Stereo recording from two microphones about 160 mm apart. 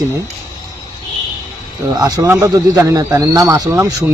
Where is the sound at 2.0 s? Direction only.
20° right (ahead or behind).